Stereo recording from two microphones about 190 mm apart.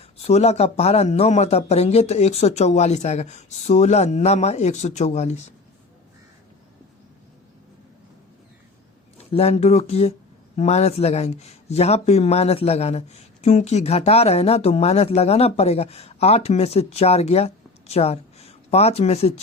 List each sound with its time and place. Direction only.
0.0 s speech: 35° left (ahead or behind)
9.1 s speech: 35° left (ahead or behind)